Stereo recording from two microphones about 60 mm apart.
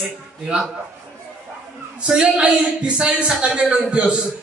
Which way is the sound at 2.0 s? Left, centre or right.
Centre.